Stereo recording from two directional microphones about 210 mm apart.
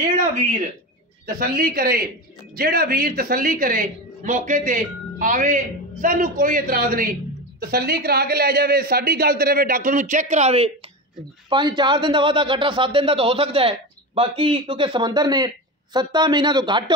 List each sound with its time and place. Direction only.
0.0 s a man's voice: 40° right (ahead or behind); by 16.9 s 20° right (ahead or behind)